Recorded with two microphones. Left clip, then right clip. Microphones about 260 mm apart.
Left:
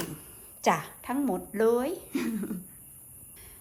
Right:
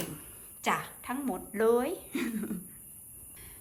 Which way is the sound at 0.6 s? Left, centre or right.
Centre.